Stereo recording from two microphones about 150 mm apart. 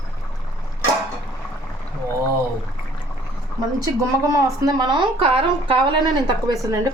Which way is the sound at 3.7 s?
25° right (ahead or behind).